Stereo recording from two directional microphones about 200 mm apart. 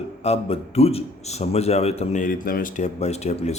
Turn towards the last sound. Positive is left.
turn(degrees=35)  # may be behind; listen again after turning